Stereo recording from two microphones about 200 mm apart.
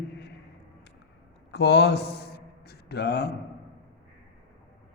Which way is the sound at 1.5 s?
55° left (ahead or behind).